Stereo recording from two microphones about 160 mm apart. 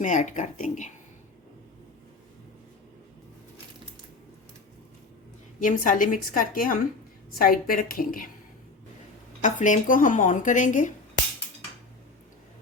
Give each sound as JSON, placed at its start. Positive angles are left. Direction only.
{"t": 0.0, "sound": "speech", "side_deg": 50}
{"t": 5.5, "sound": "a woman's voice", "side_deg": 55}
{"t": 9.4, "sound": "speech", "side_deg": 50}